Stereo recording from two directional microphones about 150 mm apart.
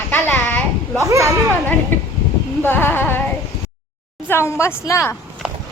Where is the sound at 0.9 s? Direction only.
20° right (ahead or behind).